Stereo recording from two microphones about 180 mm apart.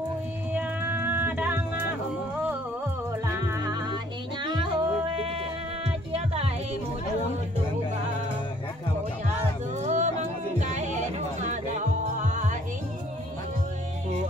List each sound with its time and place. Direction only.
0.5 s music: 10° right (ahead or behind)
3.3 s music: 15° right (ahead or behind); by 6.5 s 35° right (ahead or behind)
9.8 s music: 40° right (ahead or behind)